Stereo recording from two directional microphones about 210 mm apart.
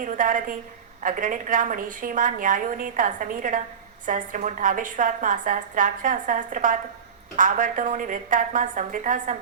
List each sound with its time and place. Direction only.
0.0 s a woman's voice: 40° right (ahead or behind)